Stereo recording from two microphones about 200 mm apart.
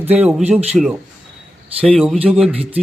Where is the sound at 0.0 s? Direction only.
10° right (ahead or behind).